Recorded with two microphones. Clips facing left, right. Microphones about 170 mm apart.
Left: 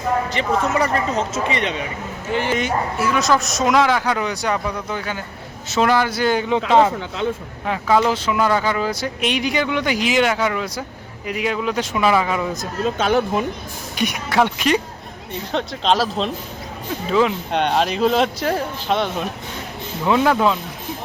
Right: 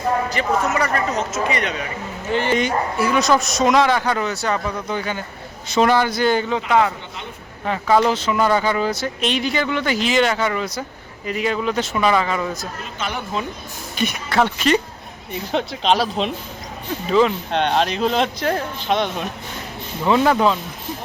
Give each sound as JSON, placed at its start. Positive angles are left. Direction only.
{"t": 0.3, "sound": "speech", "side_deg": 25}
{"t": 2.3, "sound": "a man's voice", "side_deg": 10}
{"t": 6.7, "sound": "speech", "side_deg": 30}
{"t": 7.6, "sound": "speech", "side_deg": 0}
{"t": 13.9, "sound": "speech", "side_deg": 15}
{"t": 15.5, "sound": "a man's voice", "side_deg": -5}